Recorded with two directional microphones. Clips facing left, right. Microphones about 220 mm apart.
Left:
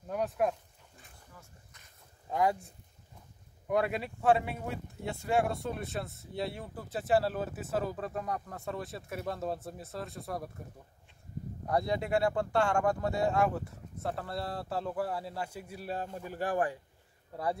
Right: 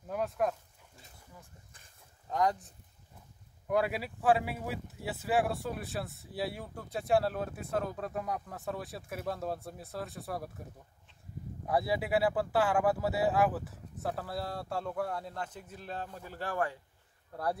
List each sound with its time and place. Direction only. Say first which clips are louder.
0.1 s speech: left 1 dB; centre (ahead or behind)
2.2 s speech: left 1 dB; 10° left (ahead or behind)
3.6 s speech: even; centre (ahead or behind)
11.6 s speech: even; 5° right (ahead or behind); by 16.7 s 15° left (ahead or behind)